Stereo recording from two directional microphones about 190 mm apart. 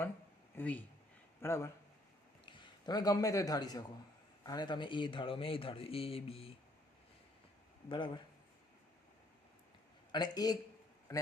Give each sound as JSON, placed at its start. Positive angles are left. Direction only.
{"t": 0.5, "sound": "a man's voice", "side_deg": 10}
{"t": 7.9, "sound": "speech", "side_deg": 25}
{"t": 10.1, "sound": "speech", "side_deg": 20}